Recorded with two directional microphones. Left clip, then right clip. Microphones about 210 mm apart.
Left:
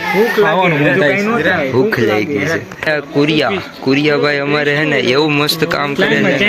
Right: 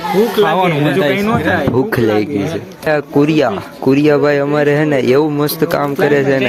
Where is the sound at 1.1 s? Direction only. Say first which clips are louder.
Left 1 dB; 30° right (ahead or behind).